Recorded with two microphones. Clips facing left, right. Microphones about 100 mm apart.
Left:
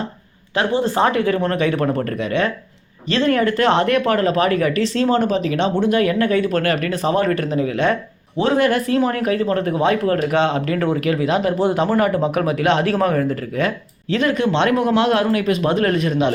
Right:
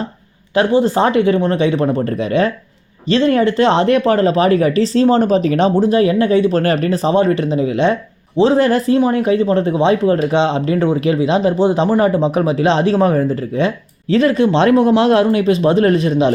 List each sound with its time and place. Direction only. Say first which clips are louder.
0.5 s speech: right 5 dB; 30° right (ahead or behind)
2.1 s speech: right 4 dB; 35° right (ahead or behind)